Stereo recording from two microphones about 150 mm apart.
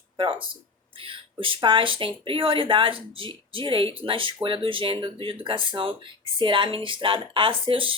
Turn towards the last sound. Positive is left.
turn(degrees=-35)  # may be behind; listen again after turning